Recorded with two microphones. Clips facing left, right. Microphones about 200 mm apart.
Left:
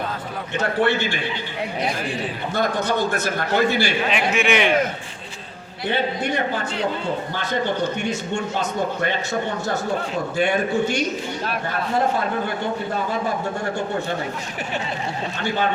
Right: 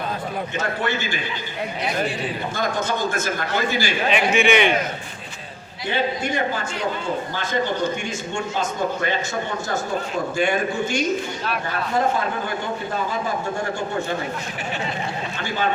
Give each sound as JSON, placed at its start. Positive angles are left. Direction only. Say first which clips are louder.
{"t": 0.8, "sound": "a man's voice", "louder": "left 5 dB", "side_deg": -40}
{"t": 2.6, "sound": "a man's voice", "louder": "left 3 dB", "side_deg": -45}
{"t": 4.1, "sound": "a man's voice", "louder": "right 5 dB", "side_deg": 0}
{"t": 10.3, "sound": "a man's voice", "louder": "left 2 dB", "side_deg": -45}